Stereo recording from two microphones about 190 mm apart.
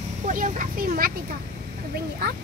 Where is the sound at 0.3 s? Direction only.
45° right (ahead or behind).